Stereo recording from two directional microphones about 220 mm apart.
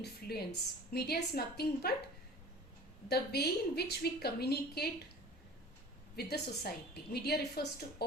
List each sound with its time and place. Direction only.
0.0 s a woman's voice: 45° left (ahead or behind)
3.1 s a woman's voice: 45° left (ahead or behind)
6.1 s a woman's voice: 50° left (ahead or behind)